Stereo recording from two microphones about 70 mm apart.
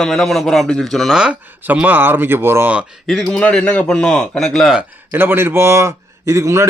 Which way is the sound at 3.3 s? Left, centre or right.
Centre.